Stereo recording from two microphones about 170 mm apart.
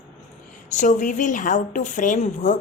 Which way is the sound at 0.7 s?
45° left (ahead or behind).